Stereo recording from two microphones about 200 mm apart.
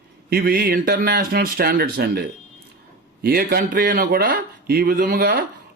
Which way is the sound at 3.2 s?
50° right (ahead or behind).